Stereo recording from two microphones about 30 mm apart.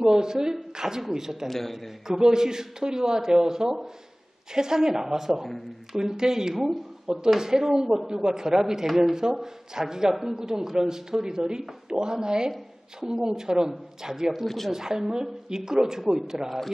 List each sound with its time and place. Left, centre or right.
0.0 s speech: right
6.6 s speech: centre
14.4 s speech: centre
14.7 s speech: centre
16.4 s a man's voice: centre